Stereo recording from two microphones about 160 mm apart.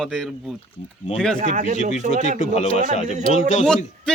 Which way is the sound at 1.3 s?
50° right (ahead or behind).